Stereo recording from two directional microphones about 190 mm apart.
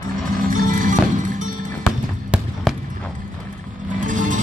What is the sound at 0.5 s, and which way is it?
Music, 45° right (ahead or behind).